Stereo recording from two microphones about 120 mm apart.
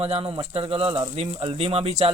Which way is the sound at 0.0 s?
55° right (ahead or behind).